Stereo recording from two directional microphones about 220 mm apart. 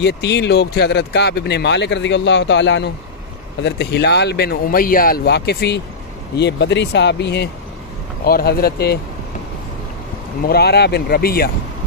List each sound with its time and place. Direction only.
0.0 s speech: 50° left (ahead or behind)
10.4 s speech: 45° left (ahead or behind)